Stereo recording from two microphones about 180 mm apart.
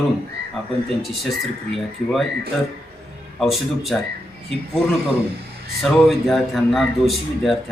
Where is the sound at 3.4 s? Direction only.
Centre (ahead or behind).